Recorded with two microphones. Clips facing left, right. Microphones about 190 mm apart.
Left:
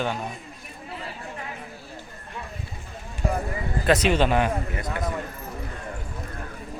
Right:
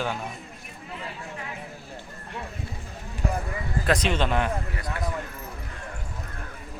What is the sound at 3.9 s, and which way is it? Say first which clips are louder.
Speech: left 4 dB; 5° left (ahead or behind).